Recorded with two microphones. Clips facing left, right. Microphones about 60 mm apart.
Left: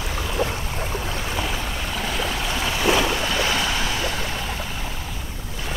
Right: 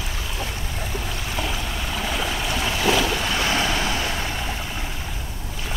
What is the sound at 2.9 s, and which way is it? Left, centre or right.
Boat, left.